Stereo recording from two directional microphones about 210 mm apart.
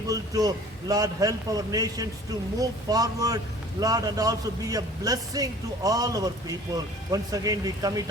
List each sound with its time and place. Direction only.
0.1 s a man's voice: 15° right (ahead or behind)